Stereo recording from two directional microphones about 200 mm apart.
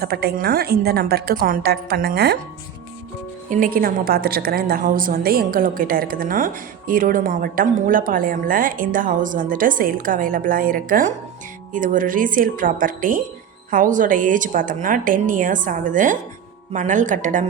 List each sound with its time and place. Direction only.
0.0 s a woman's voice: 50° right (ahead or behind)
3.5 s a woman's voice: 45° right (ahead or behind)